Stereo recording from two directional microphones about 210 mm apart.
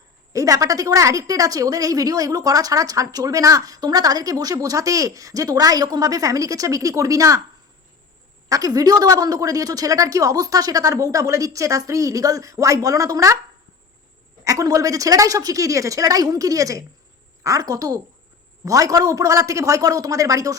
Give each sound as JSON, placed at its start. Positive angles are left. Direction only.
{"t": 0.3, "sound": "a woman's voice", "side_deg": -15}
{"t": 8.4, "sound": "a woman's voice", "side_deg": -15}
{"t": 14.4, "sound": "a woman's voice", "side_deg": -15}